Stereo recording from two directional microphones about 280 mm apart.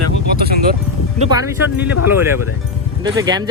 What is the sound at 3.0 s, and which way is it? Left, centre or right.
Speech, centre.